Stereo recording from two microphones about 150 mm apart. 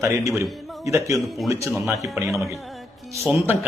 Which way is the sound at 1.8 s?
20° right (ahead or behind).